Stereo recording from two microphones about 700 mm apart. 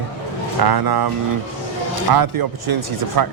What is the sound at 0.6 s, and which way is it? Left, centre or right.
Speech, right.